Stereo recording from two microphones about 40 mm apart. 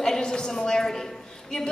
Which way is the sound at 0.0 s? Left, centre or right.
Centre.